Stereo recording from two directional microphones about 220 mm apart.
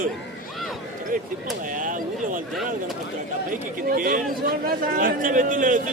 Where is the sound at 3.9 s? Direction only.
40° right (ahead or behind).